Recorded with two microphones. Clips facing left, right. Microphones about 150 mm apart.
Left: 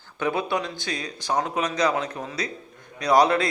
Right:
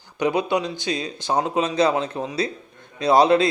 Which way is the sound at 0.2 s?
20° right (ahead or behind).